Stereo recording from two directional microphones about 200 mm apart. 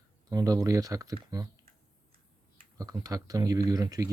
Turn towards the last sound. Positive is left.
turn(degrees=-20)  # may be behind; listen again after turning